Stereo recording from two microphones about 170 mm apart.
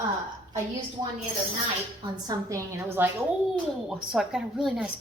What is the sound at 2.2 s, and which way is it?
A woman's voice, 20° right (ahead or behind).